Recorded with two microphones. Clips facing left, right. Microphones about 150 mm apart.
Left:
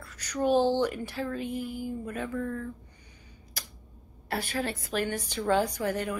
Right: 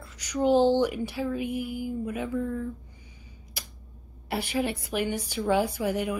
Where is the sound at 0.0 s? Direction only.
15° right (ahead or behind).